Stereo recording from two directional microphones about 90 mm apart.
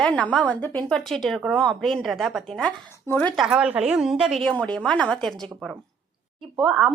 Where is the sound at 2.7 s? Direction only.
20° left (ahead or behind).